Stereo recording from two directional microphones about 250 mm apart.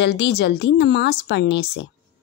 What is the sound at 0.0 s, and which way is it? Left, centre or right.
Speech, left.